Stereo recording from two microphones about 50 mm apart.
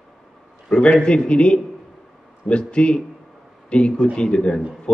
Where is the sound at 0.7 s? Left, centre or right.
Left.